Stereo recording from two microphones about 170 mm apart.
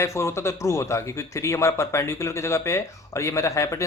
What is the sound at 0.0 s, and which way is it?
A man's voice, 15° left (ahead or behind).